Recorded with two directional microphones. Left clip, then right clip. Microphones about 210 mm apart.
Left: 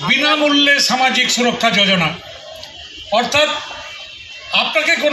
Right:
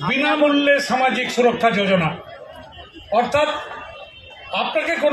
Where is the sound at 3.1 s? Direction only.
25° right (ahead or behind).